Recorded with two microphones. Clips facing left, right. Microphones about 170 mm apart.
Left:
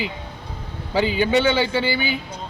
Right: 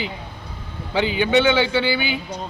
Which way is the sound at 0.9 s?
40° left (ahead or behind).